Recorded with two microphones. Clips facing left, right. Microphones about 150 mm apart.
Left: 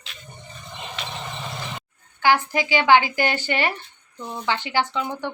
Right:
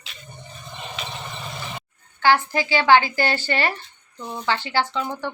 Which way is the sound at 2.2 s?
15° left (ahead or behind).